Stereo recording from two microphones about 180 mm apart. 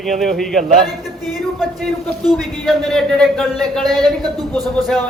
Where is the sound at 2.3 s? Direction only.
Centre (ahead or behind).